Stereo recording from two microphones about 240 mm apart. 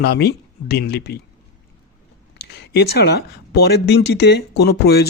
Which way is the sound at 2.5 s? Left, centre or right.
Left.